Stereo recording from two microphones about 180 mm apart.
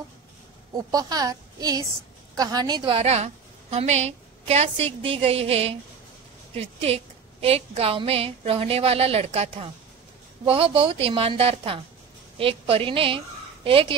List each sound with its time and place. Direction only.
0.7 s a woman's voice: 20° right (ahead or behind)
3.0 s a woman's voice: 35° right (ahead or behind)